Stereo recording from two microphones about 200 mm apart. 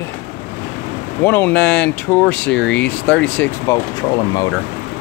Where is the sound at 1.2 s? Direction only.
10° left (ahead or behind).